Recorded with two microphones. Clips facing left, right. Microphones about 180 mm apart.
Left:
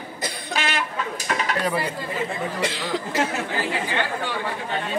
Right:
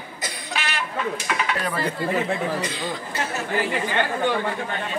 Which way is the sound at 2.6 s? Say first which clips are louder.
Left 3 dB; 85° left.